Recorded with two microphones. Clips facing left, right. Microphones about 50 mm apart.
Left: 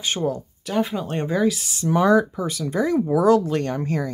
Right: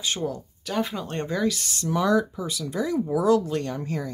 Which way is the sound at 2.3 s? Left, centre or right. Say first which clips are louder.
Left 5 dB; left.